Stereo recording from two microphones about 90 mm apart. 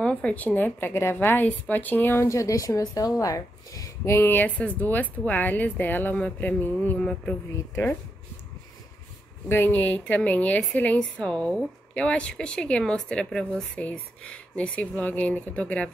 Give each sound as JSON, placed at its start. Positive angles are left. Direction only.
{"t": 0.0, "sound": "a woman's voice", "side_deg": 15}
{"t": 2.2, "sound": "a woman's voice", "side_deg": 35}
{"t": 9.5, "sound": "a woman's voice", "side_deg": 20}